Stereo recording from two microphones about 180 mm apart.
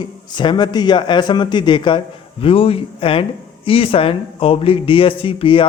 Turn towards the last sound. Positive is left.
turn(degrees=30)  # may be behind; listen again after turning